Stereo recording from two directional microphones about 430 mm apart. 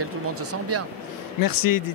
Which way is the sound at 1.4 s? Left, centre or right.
Left.